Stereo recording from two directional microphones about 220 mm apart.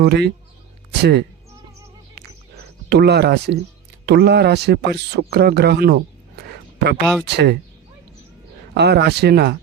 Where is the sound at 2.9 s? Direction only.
50° right (ahead or behind).